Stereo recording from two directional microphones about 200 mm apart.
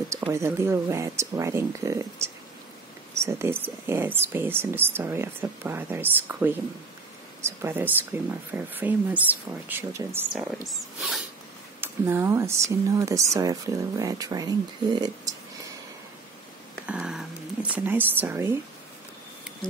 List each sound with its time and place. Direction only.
0.3 s speech: 15° right (ahead or behind)
10.7 s speech: centre (ahead or behind)
11.8 s speech: 10° right (ahead or behind)
16.8 s whispering: 5° right (ahead or behind)